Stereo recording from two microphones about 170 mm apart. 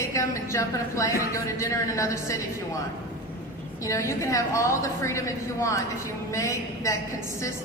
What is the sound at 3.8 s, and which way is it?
A woman's voice, 20° left (ahead or behind).